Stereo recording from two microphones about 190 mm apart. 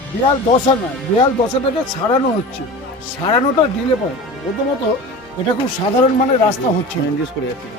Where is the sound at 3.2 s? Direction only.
25° left (ahead or behind).